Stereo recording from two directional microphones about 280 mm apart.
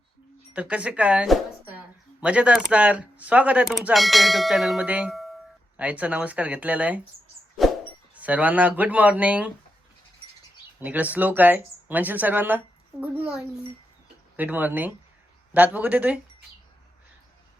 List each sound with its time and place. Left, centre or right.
0.5 s speech: centre
7.6 s a sound: centre
8.1 s speech: centre
10.8 s speech: centre